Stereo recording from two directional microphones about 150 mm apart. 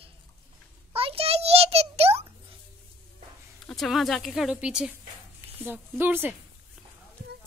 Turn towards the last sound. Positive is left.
turn(degrees=-15)  # may be behind; listen again after turning